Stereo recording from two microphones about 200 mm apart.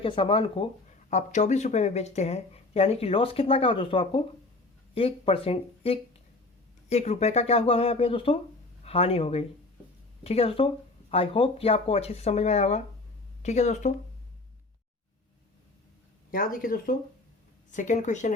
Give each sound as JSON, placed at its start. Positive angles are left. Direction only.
{"t": 0.0, "sound": "speech", "side_deg": 25}
{"t": 16.3, "sound": "speech", "side_deg": 45}